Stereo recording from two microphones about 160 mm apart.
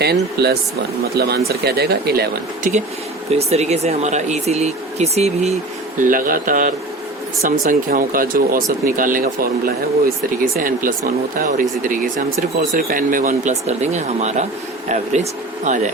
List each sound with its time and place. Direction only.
0.0 s speech: 90° right
3.3 s speech: 40° right (ahead or behind)
6.0 s speech: 60° right (ahead or behind)